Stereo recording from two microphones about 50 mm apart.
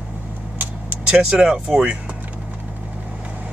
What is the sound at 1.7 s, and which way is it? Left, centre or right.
Speech, right.